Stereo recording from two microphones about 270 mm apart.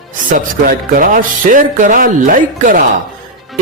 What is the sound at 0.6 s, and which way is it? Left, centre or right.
Speech, right.